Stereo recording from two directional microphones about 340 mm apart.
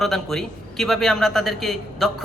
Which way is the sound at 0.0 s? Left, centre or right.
Centre.